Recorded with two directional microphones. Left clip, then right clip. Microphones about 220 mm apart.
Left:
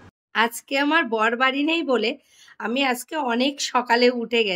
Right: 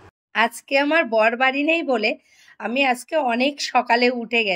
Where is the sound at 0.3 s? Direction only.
10° left (ahead or behind).